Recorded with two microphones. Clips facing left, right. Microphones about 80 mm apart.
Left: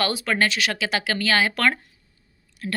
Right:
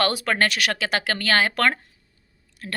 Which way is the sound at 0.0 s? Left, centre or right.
Right.